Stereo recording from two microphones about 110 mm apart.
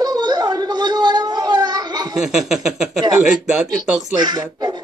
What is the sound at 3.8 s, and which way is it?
Speech, 40° right (ahead or behind).